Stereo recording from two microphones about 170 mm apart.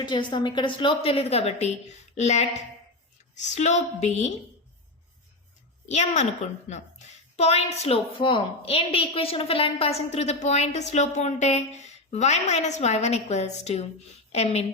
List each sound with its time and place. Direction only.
0.0 s a woman's voice: 30° left (ahead or behind)
5.9 s a woman's voice: 40° left (ahead or behind)